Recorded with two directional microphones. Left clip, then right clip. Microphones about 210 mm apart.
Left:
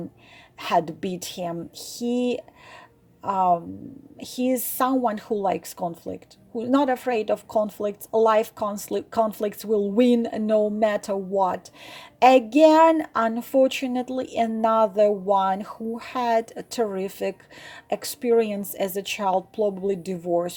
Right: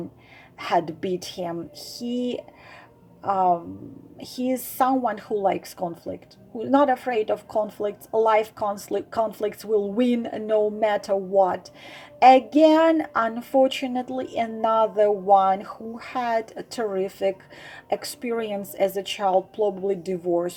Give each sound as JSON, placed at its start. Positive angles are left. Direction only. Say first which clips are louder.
{"t": 0.6, "sound": "a woman's voice", "louder": "even", "side_deg": 30}